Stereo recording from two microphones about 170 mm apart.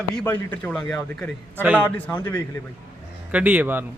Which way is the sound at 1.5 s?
10° right (ahead or behind).